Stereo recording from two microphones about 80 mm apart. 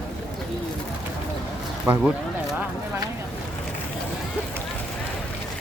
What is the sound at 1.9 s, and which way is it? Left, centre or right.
Speech, right.